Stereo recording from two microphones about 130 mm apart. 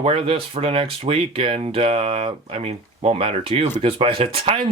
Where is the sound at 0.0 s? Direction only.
45° right (ahead or behind).